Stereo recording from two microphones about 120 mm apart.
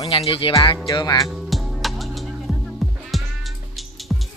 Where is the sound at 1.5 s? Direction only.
Centre (ahead or behind).